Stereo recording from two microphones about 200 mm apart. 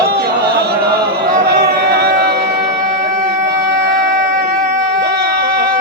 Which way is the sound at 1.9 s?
50° right (ahead or behind).